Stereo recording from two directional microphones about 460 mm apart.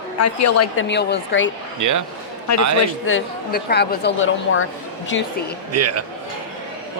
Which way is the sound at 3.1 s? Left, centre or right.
Left.